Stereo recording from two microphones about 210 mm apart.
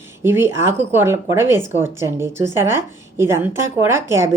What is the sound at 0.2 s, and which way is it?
Speech, 10° right (ahead or behind).